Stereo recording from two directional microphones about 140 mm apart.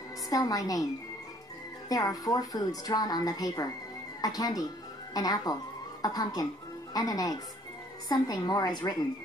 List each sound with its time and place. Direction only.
0.3 s a woman's voice: 25° left (ahead or behind)
1.9 s a woman's voice: 25° left (ahead or behind)